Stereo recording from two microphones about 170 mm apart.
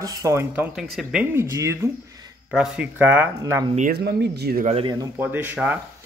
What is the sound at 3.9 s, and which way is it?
Speech, 75° right (ahead or behind).